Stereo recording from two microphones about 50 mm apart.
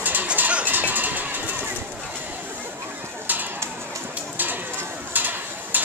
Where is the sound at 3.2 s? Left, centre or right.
Right.